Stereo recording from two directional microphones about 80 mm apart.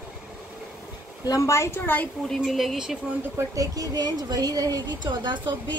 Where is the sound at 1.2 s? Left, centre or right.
Left.